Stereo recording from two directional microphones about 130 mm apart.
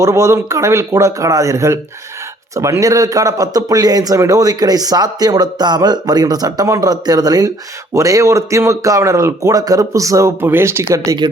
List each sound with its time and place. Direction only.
0.0 s speech: 20° right (ahead or behind)